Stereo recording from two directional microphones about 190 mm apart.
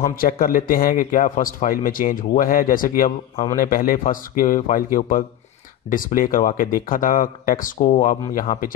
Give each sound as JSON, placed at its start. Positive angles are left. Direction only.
{"t": 0.1, "sound": "a man's voice", "side_deg": 50}